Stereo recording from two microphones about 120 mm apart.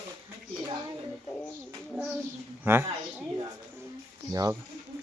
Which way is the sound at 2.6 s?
20° right (ahead or behind).